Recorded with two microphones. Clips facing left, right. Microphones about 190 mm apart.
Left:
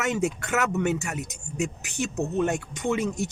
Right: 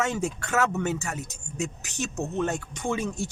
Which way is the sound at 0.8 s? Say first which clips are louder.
Left 3 dB; 65° left (ahead or behind).